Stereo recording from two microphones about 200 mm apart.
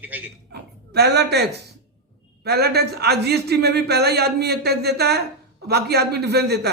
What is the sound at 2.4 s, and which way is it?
A man's voice, 55° right (ahead or behind).